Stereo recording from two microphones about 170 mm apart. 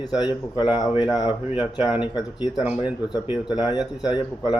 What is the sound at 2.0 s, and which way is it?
Speech, 25° left (ahead or behind).